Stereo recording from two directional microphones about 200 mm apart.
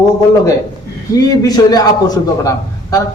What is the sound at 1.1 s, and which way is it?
A man's voice, 20° left (ahead or behind).